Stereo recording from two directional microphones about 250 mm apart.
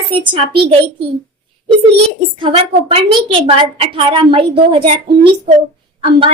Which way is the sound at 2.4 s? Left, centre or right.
Right.